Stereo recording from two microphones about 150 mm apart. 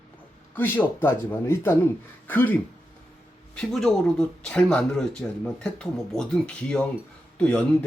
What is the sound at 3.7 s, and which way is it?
Speech, 5° left (ahead or behind).